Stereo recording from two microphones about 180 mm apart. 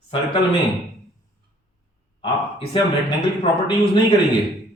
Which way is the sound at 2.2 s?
30° left (ahead or behind).